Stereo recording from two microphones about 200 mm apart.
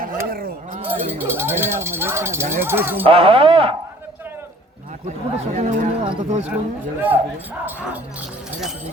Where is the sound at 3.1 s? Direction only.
25° right (ahead or behind).